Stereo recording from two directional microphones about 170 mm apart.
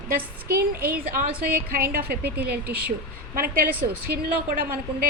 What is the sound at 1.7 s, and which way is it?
Speech, 60° right (ahead or behind).